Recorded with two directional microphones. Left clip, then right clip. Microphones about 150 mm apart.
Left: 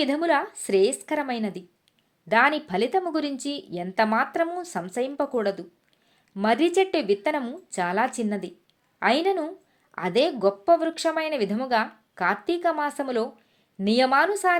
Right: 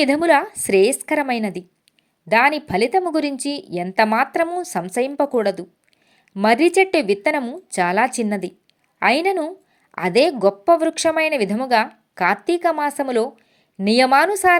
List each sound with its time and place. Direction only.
0.0 s a woman's voice: 30° right (ahead or behind)
2.3 s a woman's voice: 20° right (ahead or behind)